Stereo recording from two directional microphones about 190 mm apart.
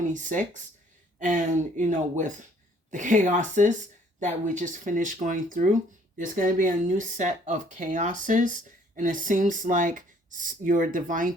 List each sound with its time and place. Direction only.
0.1 s speech: 40° right (ahead or behind)